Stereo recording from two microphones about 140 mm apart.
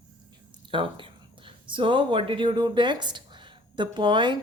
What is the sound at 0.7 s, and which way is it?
Speech, 35° right (ahead or behind).